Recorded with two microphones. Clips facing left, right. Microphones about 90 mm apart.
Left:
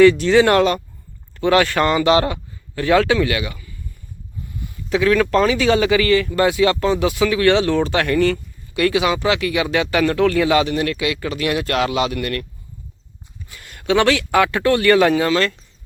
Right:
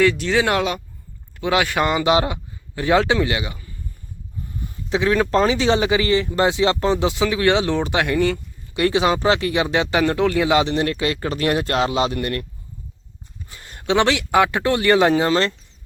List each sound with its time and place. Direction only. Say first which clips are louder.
0.0 s speech: left 6 dB; centre (ahead or behind); by 12.5 s 25° right (ahead or behind)
13.5 s speech: left 2 dB; 30° right (ahead or behind)